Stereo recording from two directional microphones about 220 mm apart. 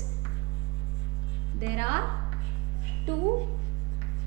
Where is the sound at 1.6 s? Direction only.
15° right (ahead or behind).